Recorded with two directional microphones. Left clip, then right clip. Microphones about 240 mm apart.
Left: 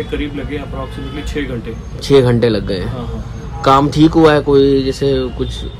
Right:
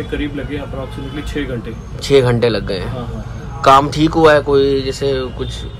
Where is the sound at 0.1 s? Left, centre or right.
Centre.